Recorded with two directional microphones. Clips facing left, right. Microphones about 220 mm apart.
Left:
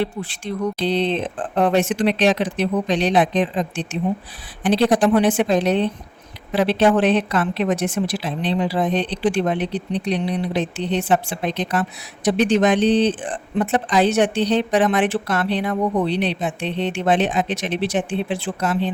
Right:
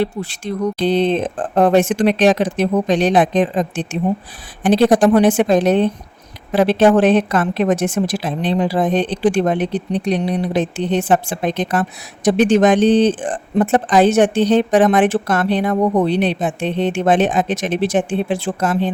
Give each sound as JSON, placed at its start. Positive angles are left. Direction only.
{"t": 0.0, "sound": "a woman's voice", "side_deg": -40}